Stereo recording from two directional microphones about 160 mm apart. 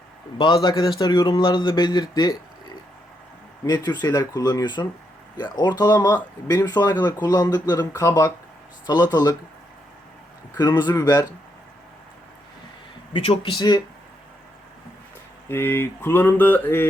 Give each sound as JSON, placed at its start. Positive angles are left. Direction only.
{"t": 0.3, "sound": "a man's voice", "side_deg": 25}
{"t": 3.6, "sound": "a man's voice", "side_deg": 25}
{"t": 10.6, "sound": "a man's voice", "side_deg": 25}
{"t": 13.1, "sound": "speech", "side_deg": 35}
{"t": 15.4, "sound": "a sound", "side_deg": 15}